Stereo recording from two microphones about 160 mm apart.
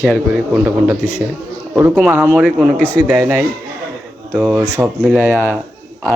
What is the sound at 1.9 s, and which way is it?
Speech, 5° right (ahead or behind).